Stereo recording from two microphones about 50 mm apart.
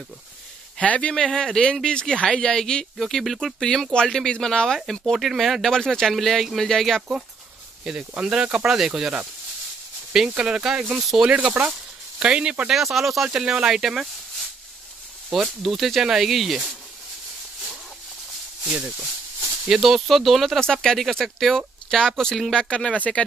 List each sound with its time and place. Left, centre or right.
0.8 s speech: left
1.1 s speech: centre
3.6 s speech: centre
8.2 s speech: centre
10.3 s speech: centre
11.0 s speech: centre
11.6 s speech: right
12.2 s speech: centre
12.7 s speech: centre
13.3 s speech: centre
15.3 s speech: centre
19.7 s speech: centre
22.9 s speech: left